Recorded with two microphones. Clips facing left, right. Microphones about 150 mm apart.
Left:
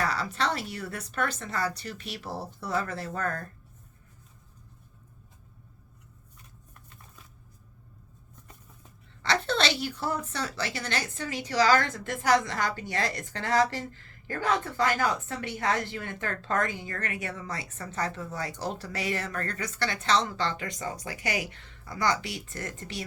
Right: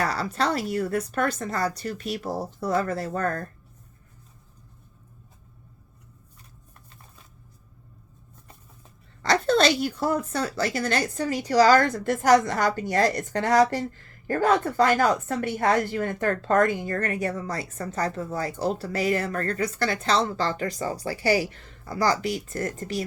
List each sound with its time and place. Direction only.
0.0 s speech: 40° right (ahead or behind)
9.2 s speech: 40° right (ahead or behind)